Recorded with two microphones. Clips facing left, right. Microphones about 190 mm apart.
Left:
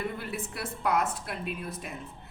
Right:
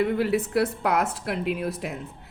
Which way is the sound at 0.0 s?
90° right.